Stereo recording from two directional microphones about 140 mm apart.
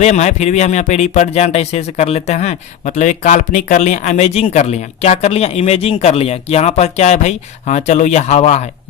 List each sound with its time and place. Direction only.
0.0 s speech: 55° left (ahead or behind)